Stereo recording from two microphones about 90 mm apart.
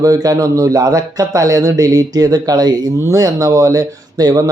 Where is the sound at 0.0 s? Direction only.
40° right (ahead or behind).